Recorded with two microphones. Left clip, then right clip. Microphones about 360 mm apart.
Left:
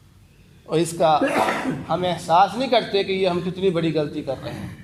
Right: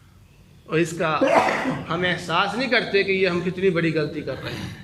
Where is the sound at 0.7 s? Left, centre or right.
Centre.